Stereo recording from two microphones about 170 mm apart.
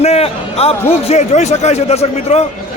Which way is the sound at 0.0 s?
35° left (ahead or behind).